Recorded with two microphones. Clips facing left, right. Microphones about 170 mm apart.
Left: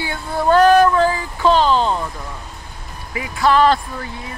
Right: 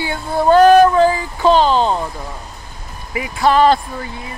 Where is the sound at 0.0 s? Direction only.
25° right (ahead or behind).